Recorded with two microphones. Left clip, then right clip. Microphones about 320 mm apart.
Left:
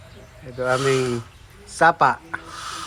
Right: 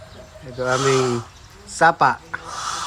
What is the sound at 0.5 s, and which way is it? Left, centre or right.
A woman's voice, centre.